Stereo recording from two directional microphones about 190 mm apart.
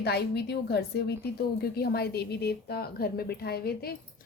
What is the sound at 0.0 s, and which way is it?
A woman's voice, 60° left (ahead or behind).